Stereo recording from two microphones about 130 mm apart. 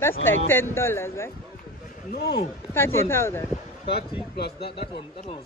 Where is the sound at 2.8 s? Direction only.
20° left (ahead or behind).